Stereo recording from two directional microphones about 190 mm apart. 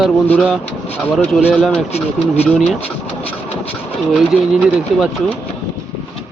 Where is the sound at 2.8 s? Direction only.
30° left (ahead or behind).